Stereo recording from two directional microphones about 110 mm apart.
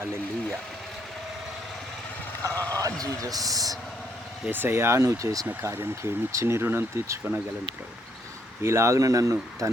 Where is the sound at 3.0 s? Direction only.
35° right (ahead or behind).